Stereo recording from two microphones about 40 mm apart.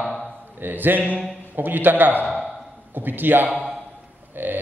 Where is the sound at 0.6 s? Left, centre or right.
Right.